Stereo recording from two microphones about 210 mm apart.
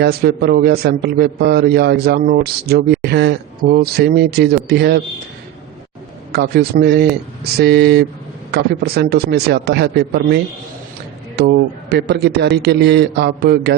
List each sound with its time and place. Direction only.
0.0 s a man's voice: 50° right (ahead or behind)
6.3 s a man's voice: 50° right (ahead or behind)